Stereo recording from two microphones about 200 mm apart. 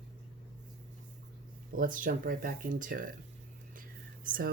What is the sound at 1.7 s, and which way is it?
Speech, 45° right (ahead or behind).